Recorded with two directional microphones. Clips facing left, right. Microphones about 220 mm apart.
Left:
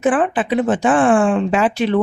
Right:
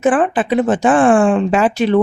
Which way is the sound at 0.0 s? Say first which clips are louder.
Right 2 dB; 45° right (ahead or behind).